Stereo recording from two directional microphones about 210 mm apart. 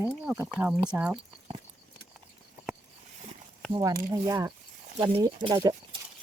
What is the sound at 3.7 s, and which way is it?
Speech, 15° right (ahead or behind).